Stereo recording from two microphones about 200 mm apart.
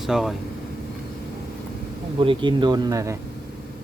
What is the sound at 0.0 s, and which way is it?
Speech, centre (ahead or behind).